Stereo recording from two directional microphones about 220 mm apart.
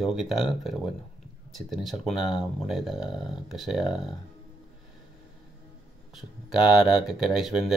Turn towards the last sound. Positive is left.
turn(degrees=0)  # may be behind; listen again after turning